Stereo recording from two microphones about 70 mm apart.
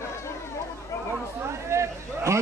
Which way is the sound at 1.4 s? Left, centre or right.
Right.